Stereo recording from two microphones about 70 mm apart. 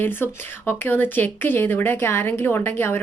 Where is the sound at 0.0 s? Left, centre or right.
Left.